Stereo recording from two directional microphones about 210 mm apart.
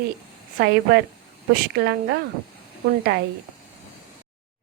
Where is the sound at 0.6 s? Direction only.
50° right (ahead or behind).